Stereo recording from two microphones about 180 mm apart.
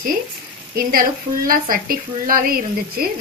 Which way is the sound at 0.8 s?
50° right (ahead or behind).